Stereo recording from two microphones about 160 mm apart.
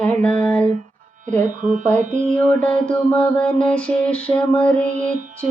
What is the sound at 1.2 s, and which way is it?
Speech, 50° right (ahead or behind).